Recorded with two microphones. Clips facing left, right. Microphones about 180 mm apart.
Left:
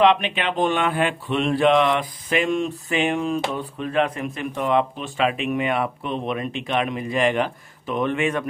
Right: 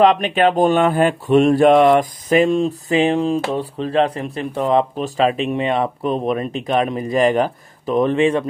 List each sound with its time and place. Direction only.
0.0 s speech: 45° right (ahead or behind)